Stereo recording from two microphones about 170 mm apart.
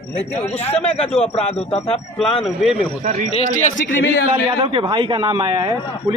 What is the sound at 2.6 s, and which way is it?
Speech, centre (ahead or behind).